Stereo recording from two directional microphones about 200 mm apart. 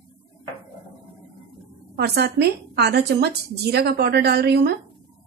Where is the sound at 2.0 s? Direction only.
55° right (ahead or behind).